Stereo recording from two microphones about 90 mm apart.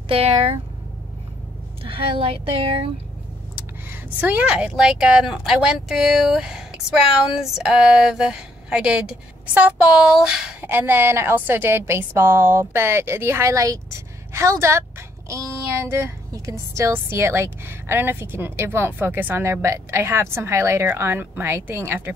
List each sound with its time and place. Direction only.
0.1 s speech: 90° right
1.9 s speech: 80° right
3.5 s speech: 20° right (ahead or behind)
7.2 s female singing: 5° right (ahead or behind)
10.0 s a sound: 5° right (ahead or behind)
10.6 s speech: 20° right (ahead or behind)